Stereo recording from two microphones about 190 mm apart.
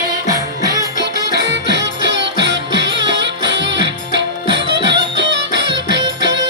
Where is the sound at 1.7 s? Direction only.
65° right (ahead or behind).